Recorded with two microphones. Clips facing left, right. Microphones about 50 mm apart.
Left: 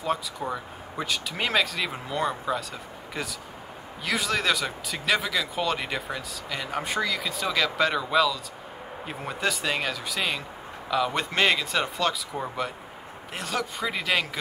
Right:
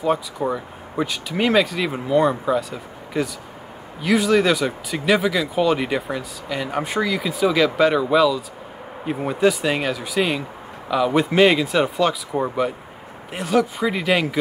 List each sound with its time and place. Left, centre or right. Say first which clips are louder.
0.5 s speech: right 6 dB; centre
12.3 s speech: right 9 dB; centre